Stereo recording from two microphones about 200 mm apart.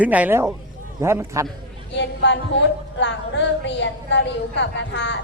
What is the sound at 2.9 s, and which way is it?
A woman's voice, 60° left (ahead or behind).